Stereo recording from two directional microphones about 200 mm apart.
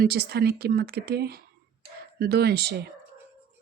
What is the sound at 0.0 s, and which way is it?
Speech, 50° right (ahead or behind).